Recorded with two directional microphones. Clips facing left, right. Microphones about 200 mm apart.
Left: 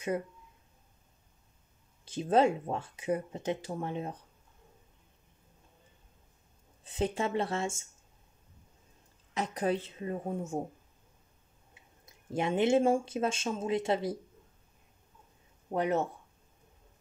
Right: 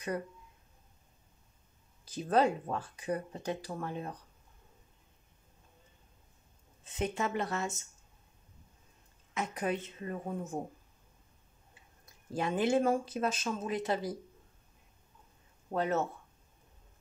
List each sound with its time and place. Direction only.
2.0 s speech: 25° left (ahead or behind)
6.8 s speech: 30° left (ahead or behind)
9.3 s a woman's voice: 35° left (ahead or behind)
12.1 s speech: 25° left (ahead or behind)
15.7 s speech: 15° left (ahead or behind)